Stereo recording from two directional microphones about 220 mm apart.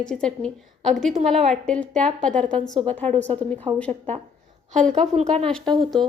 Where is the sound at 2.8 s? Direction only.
30° right (ahead or behind).